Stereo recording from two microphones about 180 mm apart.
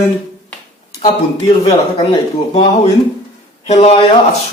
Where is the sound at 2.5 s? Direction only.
35° left (ahead or behind).